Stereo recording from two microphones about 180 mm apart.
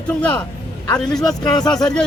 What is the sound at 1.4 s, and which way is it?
Speech, 25° left (ahead or behind).